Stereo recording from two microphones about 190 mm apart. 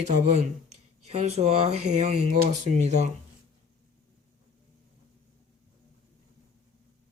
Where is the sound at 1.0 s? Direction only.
35° right (ahead or behind).